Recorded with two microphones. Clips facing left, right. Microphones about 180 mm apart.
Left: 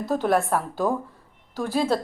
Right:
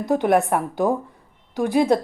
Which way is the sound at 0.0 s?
15° right (ahead or behind).